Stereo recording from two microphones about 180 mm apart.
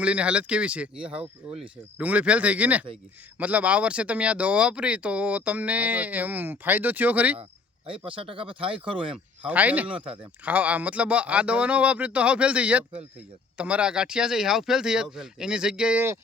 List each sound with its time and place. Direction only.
0.0 s speech: 5° right (ahead or behind)
7.9 s speech: 30° right (ahead or behind)
9.5 s speech: 10° right (ahead or behind)